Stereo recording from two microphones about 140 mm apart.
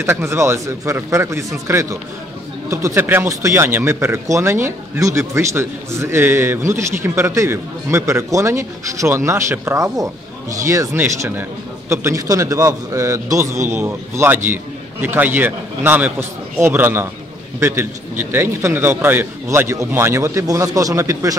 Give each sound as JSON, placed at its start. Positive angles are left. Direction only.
{"t": 0.0, "sound": "a man's voice", "side_deg": -20}